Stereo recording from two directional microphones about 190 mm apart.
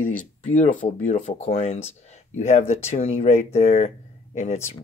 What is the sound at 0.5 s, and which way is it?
Speech, 40° left (ahead or behind).